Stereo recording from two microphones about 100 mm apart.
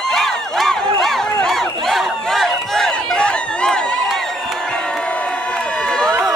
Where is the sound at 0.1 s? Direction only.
Centre (ahead or behind).